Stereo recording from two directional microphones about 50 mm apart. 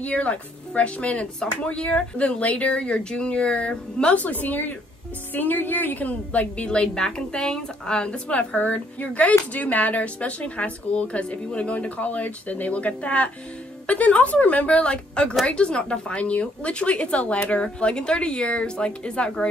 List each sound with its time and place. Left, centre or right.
0.0 s a woman's voice: left